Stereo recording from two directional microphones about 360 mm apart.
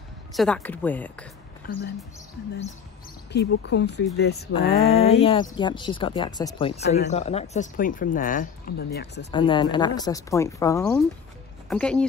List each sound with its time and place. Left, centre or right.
0.3 s speech: centre
1.6 s speech: left
3.3 s speech: left; by 6.7 s centre
6.8 s speech: left
9.3 s speech: centre